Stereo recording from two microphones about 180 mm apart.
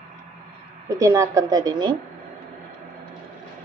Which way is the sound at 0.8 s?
15° right (ahead or behind).